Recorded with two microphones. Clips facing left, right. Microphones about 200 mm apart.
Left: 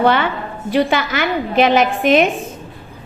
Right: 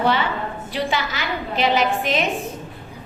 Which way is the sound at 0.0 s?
60° left (ahead or behind).